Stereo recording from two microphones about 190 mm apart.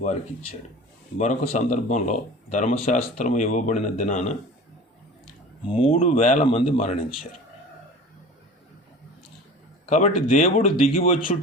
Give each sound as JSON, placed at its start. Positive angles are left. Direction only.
{"t": 0.0, "sound": "speech", "side_deg": 35}
{"t": 5.6, "sound": "speech", "side_deg": 30}
{"t": 9.8, "sound": "speech", "side_deg": 40}